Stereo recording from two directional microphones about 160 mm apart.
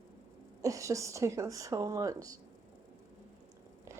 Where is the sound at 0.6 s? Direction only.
20° right (ahead or behind).